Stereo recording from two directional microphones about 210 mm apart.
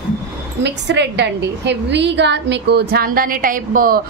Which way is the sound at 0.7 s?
55° right (ahead or behind).